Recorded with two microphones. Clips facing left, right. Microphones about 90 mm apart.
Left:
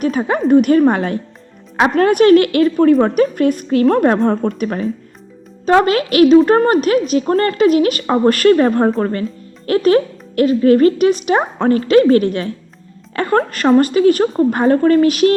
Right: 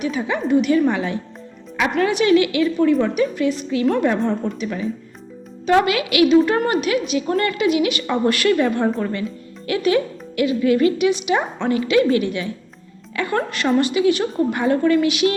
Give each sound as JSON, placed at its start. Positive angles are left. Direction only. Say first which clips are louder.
{"t": 0.0, "sound": "a woman's voice", "louder": "left 6 dB", "side_deg": 45}